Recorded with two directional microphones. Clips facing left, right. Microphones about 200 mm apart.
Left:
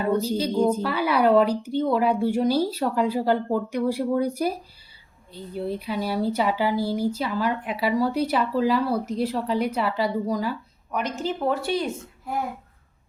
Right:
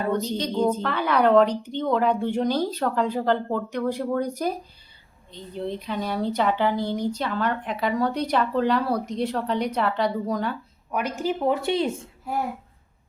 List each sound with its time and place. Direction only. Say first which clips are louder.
0.0 s a woman's voice: left 2 dB; 10° left (ahead or behind)
11.0 s speech: right 2 dB; 10° right (ahead or behind)